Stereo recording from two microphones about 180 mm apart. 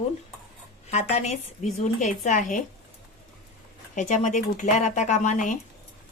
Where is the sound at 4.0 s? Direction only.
40° left (ahead or behind).